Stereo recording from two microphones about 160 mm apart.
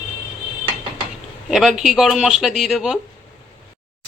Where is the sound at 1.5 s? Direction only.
5° right (ahead or behind).